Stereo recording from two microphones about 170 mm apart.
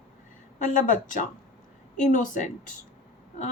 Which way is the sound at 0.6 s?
50° left (ahead or behind).